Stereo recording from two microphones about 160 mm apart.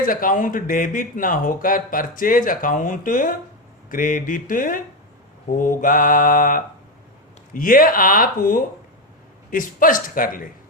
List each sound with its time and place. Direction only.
0.0 s speech: 60° left (ahead or behind)